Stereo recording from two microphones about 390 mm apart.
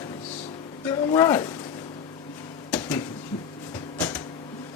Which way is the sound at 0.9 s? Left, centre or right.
Centre.